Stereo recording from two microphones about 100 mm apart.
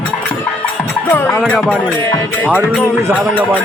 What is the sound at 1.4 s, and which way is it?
Music, 10° left (ahead or behind).